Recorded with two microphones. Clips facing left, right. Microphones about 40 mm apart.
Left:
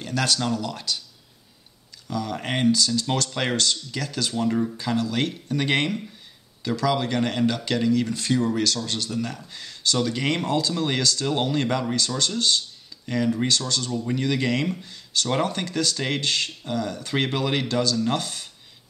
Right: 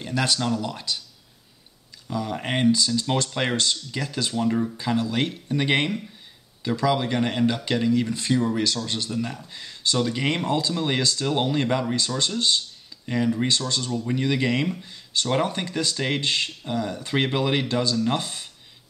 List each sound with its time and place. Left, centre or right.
0.0 s speech: centre
0.4 s speech: centre
0.7 s speech: centre
2.0 s speech: centre
4.7 s speech: centre
13.7 s speech: centre
13.9 s speech: centre